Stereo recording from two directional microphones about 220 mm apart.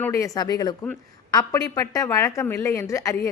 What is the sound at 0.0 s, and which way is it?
Speech, 15° left (ahead or behind).